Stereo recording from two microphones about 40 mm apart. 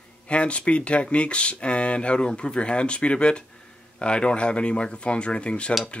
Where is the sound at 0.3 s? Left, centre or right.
Left.